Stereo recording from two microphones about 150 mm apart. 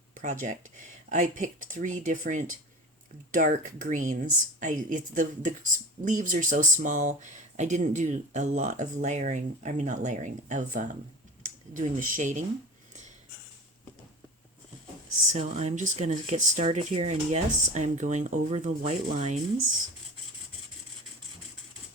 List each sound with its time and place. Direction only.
0.1 s speech: 60° right (ahead or behind)
15.3 s speech: 50° right (ahead or behind)